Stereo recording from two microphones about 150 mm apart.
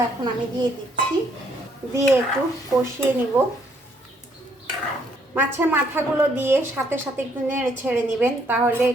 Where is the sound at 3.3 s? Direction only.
10° right (ahead or behind).